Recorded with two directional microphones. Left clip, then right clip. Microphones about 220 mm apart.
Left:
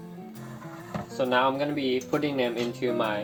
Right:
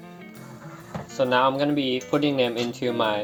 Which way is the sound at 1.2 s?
40° right (ahead or behind).